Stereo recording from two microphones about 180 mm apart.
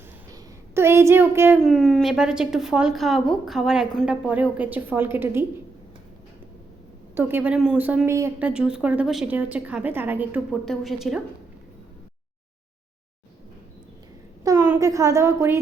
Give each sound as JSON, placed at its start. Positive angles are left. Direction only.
{"t": 0.7, "sound": "a child's voice", "side_deg": -15}
{"t": 1.6, "sound": "a woman's voice", "side_deg": 0}
{"t": 7.2, "sound": "a woman's voice", "side_deg": -10}
{"t": 14.4, "sound": "a woman's voice", "side_deg": -15}